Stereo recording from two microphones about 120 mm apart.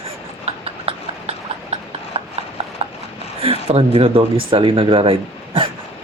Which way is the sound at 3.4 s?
55° right (ahead or behind).